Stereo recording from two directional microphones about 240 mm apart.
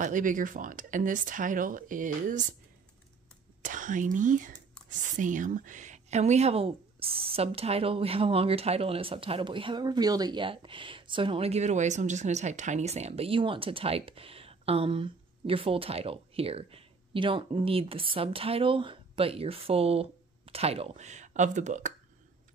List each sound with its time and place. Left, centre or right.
0.0 s speech: right
3.6 s a woman's voice: right